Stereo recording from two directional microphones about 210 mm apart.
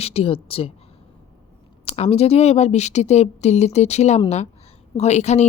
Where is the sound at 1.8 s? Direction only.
30° left (ahead or behind).